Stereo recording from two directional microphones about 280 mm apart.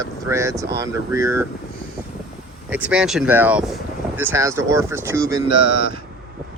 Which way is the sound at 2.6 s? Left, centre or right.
Centre.